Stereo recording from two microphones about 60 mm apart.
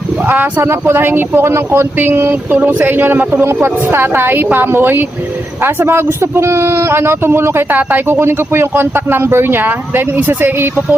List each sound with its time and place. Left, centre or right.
0.3 s speech: right
2.3 s speech: right
3.4 s speech: right